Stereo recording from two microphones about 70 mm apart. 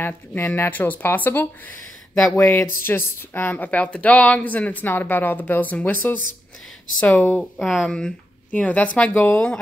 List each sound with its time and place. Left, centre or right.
0.0 s speech: left
7.5 s speech: centre; by 9.6 s left